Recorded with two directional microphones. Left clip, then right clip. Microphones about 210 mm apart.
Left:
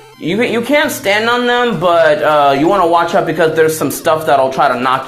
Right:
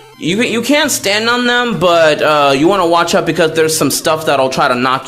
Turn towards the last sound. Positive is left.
turn(degrees=-40)  # may be behind; listen again after turning